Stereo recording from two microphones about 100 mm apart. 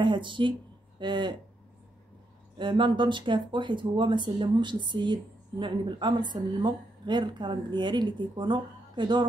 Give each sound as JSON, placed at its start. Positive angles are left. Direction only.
{"t": 0.0, "sound": "speech", "side_deg": -55}
{"t": 2.6, "sound": "speech", "side_deg": -50}